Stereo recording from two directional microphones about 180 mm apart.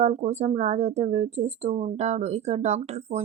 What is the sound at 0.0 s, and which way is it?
Speech, 40° right (ahead or behind).